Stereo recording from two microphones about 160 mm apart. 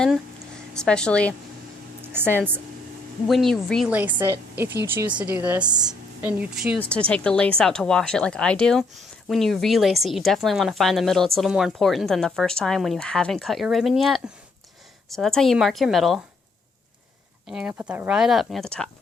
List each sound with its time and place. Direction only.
0.7 s speech: 5° left (ahead or behind)
3.2 s speech: centre (ahead or behind)
3.8 s speech: 10° right (ahead or behind)
5.6 s a woman's voice: 25° right (ahead or behind)
6.2 s speech: 10° right (ahead or behind)
6.7 s a woman's voice: 5° left (ahead or behind)
17.5 s speech: 5° right (ahead or behind)